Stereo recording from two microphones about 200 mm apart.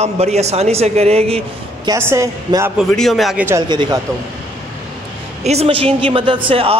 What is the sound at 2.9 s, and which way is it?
Speech, centre (ahead or behind).